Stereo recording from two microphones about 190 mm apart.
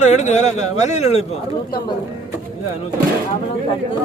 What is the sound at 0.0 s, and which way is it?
Speech, 40° left (ahead or behind).